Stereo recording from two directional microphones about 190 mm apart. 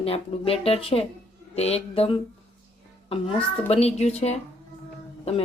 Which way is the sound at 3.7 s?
35° left (ahead or behind).